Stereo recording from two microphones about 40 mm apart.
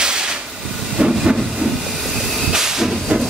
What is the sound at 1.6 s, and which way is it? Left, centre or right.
Train, right.